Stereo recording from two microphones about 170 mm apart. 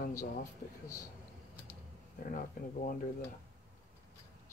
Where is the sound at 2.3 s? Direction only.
55° left (ahead or behind).